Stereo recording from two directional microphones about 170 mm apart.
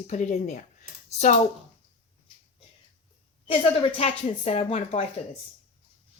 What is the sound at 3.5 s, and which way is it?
Speech, 35° left (ahead or behind).